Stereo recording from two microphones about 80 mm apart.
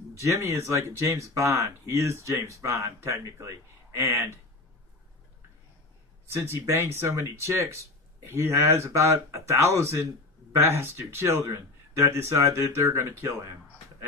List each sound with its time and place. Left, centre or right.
0.2 s speech: right
6.3 s speech: right
13.2 s a sound: right